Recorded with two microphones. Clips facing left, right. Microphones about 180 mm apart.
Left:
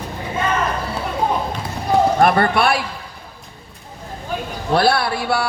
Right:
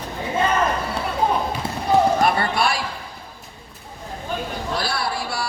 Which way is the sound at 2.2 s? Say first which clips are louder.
Left 5 dB; 55° left (ahead or behind).